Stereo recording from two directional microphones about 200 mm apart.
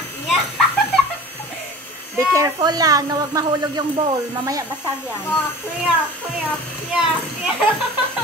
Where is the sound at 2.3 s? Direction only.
15° right (ahead or behind).